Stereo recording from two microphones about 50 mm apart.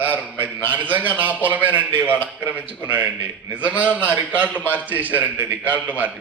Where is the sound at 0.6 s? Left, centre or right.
Right.